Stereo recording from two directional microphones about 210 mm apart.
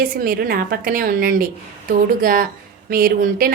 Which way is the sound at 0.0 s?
45° right (ahead or behind).